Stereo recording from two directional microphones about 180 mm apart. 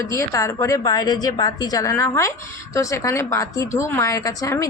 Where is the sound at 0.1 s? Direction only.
15° left (ahead or behind).